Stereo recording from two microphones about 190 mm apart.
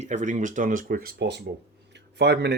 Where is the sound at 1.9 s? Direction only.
65° right (ahead or behind).